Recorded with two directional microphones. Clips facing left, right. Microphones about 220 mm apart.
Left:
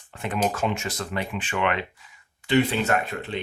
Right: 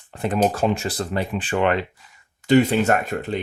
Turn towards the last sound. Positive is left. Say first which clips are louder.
# right 4 dB
turn(degrees=-45)  # may be behind; listen again after turning